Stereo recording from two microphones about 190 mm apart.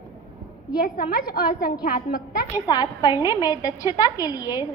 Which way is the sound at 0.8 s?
50° left (ahead or behind).